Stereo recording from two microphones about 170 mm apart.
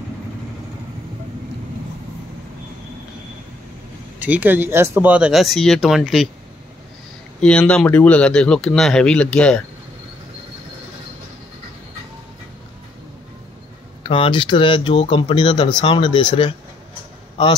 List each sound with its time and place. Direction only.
4.2 s speech: 10° right (ahead or behind)
7.3 s speech: 5° left (ahead or behind)
14.0 s speech: 30° left (ahead or behind)